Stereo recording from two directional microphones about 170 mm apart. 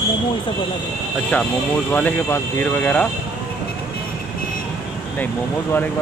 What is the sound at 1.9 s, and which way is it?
Speech, 10° left (ahead or behind).